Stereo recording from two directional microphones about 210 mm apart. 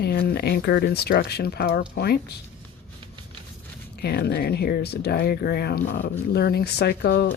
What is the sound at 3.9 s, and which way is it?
Speech, 50° left (ahead or behind).